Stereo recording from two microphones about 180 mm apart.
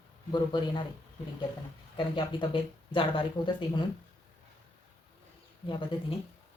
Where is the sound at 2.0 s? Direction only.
25° left (ahead or behind).